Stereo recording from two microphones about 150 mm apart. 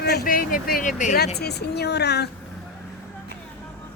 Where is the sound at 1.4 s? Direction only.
90° left.